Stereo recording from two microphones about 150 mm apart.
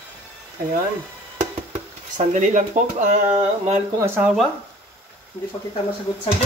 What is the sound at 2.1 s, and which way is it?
Speech, 55° right (ahead or behind).